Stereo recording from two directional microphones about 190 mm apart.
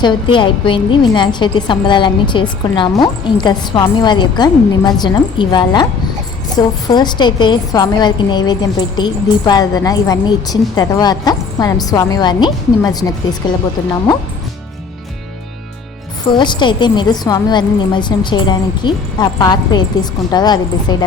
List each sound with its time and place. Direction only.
0.0 s a woman's voice: 25° left (ahead or behind)
16.3 s a woman's voice: 25° left (ahead or behind)